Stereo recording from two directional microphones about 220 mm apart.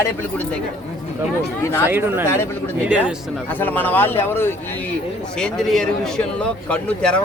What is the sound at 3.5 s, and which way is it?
A man's voice, 10° left (ahead or behind).